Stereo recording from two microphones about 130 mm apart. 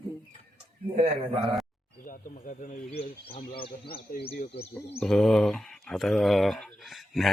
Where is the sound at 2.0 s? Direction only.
90° left.